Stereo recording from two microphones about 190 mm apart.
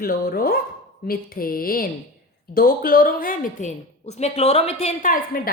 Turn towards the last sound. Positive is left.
turn(degrees=45)  # may be behind; listen again after turning